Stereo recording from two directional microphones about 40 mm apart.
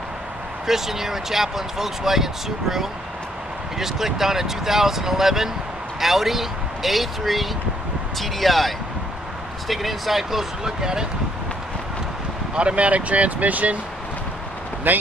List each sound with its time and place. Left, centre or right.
0.7 s speech: centre
3.8 s speech: centre
12.5 s speech: right
14.9 s a man's voice: right